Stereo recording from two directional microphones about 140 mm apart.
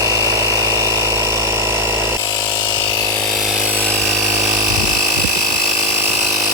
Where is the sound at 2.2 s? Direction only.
25° left (ahead or behind).